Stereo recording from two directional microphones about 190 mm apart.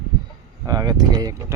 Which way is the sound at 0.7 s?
20° right (ahead or behind).